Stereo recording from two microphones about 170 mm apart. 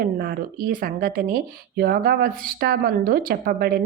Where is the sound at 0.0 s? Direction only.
60° right (ahead or behind).